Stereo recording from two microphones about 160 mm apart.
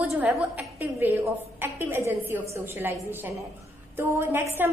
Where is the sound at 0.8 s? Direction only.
15° right (ahead or behind).